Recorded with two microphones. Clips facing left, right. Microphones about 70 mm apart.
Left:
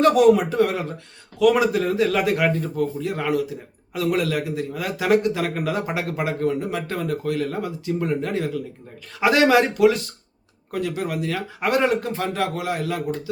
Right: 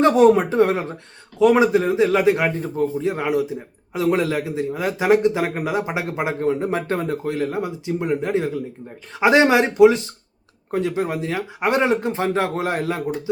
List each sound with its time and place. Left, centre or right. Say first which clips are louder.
0.0 s a man's voice: right 1 dB; right